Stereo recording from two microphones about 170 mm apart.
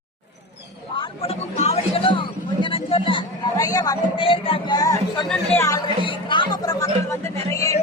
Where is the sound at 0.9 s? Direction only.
30° left (ahead or behind).